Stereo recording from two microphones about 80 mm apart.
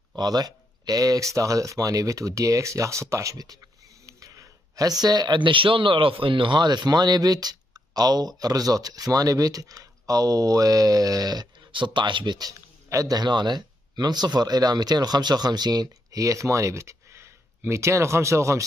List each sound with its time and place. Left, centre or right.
0.1 s speech: right
11.7 s speech: right
12.9 s speech: right
13.2 s speech: right